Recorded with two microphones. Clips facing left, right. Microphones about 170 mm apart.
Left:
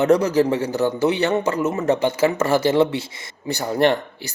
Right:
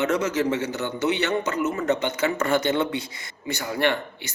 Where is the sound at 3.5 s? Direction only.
35° left (ahead or behind).